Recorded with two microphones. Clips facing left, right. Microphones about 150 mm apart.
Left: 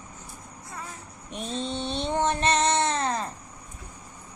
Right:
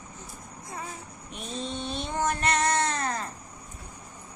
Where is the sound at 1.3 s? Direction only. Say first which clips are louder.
Left 4 dB; 30° left (ahead or behind).